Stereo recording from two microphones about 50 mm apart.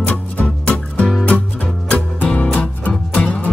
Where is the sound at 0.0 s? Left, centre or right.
Left.